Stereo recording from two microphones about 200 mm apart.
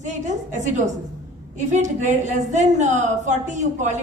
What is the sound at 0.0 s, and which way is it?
A woman's voice, 35° right (ahead or behind).